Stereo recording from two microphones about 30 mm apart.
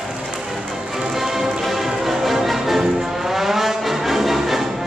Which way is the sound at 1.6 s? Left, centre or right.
Centre.